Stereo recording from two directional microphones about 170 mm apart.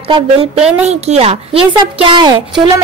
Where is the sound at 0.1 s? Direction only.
35° right (ahead or behind).